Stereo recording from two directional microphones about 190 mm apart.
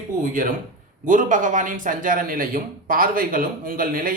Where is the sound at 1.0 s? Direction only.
45° right (ahead or behind).